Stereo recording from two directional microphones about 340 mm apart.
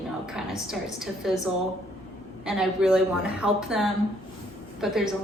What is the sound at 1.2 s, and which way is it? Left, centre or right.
Speech, centre.